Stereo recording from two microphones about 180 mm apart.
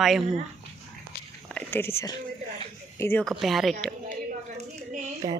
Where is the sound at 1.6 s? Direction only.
10° left (ahead or behind).